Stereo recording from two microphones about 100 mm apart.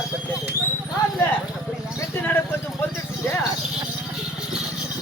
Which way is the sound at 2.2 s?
20° left (ahead or behind).